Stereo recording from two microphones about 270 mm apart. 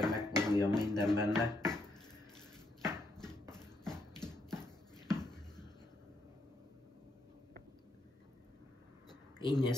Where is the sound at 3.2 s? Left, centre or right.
Centre.